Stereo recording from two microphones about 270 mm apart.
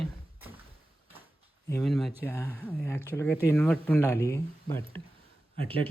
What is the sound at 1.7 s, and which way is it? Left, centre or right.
Speech, centre.